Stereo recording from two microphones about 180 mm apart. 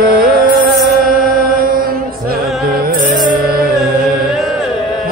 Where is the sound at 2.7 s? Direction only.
50° right (ahead or behind).